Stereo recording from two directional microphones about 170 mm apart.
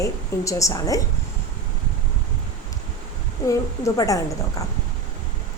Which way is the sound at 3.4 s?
20° left (ahead or behind).